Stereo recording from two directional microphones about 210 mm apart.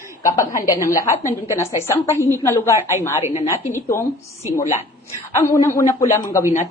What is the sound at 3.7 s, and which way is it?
Speech, 15° left (ahead or behind).